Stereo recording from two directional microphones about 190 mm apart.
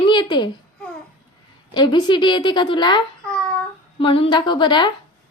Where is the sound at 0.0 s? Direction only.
25° left (ahead or behind).